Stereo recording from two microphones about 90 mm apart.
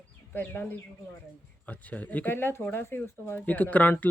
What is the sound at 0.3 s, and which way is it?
Speech, 20° left (ahead or behind).